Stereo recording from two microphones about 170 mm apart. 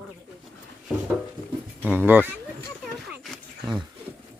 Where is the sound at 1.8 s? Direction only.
10° right (ahead or behind).